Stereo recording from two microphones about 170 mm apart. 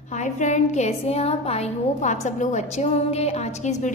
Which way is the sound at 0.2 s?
45° left (ahead or behind).